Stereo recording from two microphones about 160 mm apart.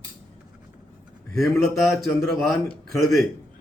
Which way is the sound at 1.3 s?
Centre (ahead or behind).